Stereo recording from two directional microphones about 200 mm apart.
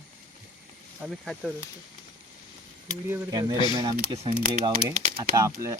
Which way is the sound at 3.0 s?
15° right (ahead or behind).